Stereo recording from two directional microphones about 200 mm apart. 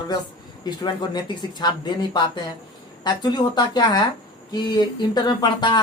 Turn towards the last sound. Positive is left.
turn(degrees=20)  # may be behind; listen again after turning